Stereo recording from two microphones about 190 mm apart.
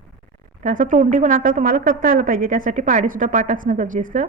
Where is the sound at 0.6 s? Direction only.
45° right (ahead or behind).